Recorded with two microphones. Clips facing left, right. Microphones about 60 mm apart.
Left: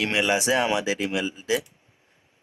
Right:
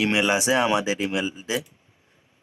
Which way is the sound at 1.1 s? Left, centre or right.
Centre.